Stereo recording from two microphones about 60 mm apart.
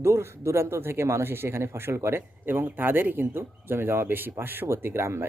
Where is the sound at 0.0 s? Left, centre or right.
Right.